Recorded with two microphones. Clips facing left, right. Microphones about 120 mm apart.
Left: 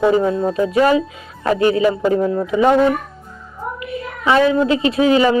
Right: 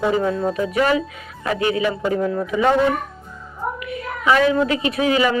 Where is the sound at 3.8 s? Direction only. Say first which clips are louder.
Left 3 dB; 25° left (ahead or behind).